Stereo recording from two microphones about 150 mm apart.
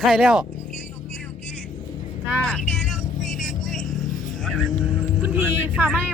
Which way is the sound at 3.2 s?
60° left (ahead or behind).